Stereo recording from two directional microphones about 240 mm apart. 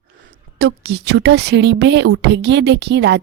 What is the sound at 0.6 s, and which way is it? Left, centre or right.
A woman's voice, right.